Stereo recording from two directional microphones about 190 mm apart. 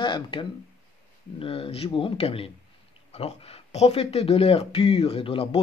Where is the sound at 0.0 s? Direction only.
25° left (ahead or behind).